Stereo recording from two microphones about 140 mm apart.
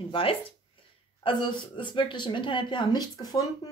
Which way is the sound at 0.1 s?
40° left (ahead or behind).